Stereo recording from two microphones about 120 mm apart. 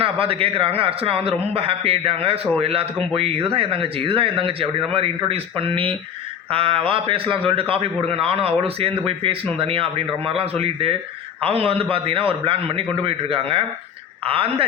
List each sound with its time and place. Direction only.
0.0 s a man's voice: 50° right (ahead or behind)